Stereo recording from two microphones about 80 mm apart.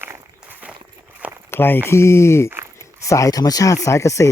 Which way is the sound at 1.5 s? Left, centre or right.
Left.